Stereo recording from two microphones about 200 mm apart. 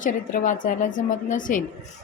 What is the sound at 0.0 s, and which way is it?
A woman's voice, 40° left (ahead or behind).